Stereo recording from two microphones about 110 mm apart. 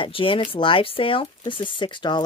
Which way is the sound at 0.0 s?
55° left (ahead or behind).